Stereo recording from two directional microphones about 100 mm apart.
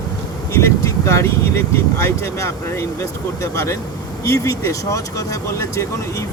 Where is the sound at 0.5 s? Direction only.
30° left (ahead or behind).